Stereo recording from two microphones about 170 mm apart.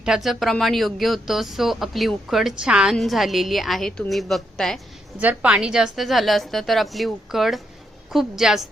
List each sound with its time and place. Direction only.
0.0 s speech: 5° right (ahead or behind)
5.2 s speech: 10° right (ahead or behind)